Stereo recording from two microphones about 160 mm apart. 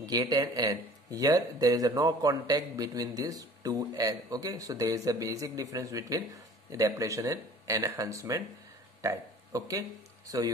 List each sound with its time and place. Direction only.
0.0 s speech: 25° right (ahead or behind)